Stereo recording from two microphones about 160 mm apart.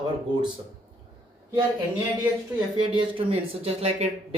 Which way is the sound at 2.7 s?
30° right (ahead or behind).